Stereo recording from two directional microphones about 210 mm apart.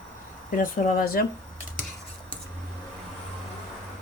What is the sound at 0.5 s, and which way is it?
Speech, 40° left (ahead or behind).